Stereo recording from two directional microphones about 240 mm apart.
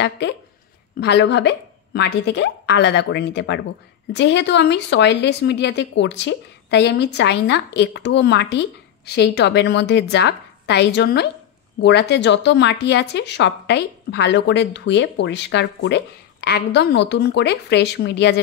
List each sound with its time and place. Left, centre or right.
0.2 s speech: left